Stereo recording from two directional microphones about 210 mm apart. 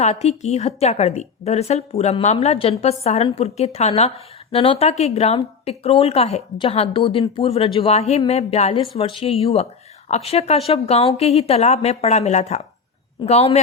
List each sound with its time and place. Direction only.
0.0 s a woman's voice: 30° left (ahead or behind)